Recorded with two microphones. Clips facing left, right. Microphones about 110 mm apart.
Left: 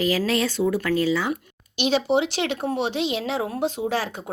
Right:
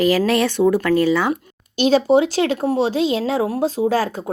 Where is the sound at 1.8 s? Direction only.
45° right (ahead or behind).